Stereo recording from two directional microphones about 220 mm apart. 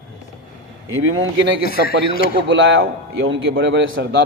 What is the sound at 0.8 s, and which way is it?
Speech, 65° right (ahead or behind).